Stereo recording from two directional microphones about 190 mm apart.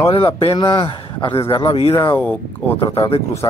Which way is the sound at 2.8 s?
30° left (ahead or behind).